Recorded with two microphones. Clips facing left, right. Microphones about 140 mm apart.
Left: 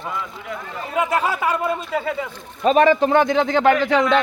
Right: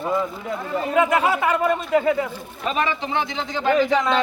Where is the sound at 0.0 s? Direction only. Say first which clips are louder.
Right 6 dB; 30° right (ahead or behind).